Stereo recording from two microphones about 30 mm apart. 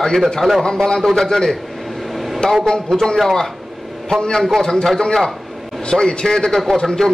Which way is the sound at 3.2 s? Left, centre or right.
Centre.